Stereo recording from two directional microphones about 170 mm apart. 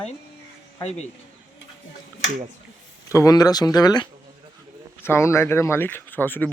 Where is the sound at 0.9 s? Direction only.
40° left (ahead or behind).